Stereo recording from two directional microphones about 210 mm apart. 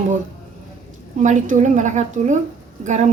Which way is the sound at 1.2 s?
35° right (ahead or behind).